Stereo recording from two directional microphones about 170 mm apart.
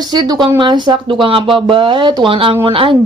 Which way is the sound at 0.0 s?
25° right (ahead or behind).